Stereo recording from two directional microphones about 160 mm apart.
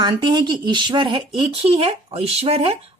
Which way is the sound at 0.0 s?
30° right (ahead or behind).